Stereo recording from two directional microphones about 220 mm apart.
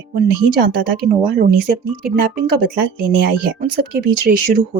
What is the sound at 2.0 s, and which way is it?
Speech, 45° right (ahead or behind).